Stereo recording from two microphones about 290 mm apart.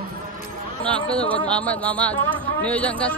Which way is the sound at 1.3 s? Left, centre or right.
Centre.